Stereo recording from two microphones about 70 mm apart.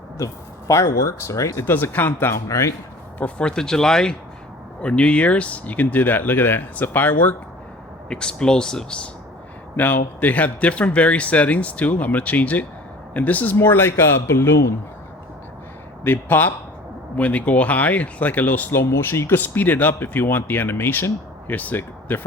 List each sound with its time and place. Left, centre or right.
0.7 s speech: left
1.6 s speech: left
2.5 s speech: left
3.2 s speech: centre
8.1 s speech: centre
9.7 s speech: left
16.0 s speech: left